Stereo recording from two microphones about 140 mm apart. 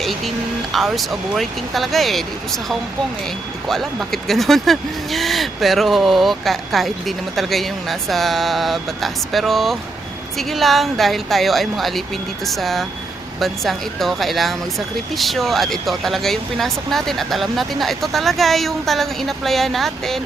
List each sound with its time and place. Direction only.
0.7 s speech: centre (ahead or behind)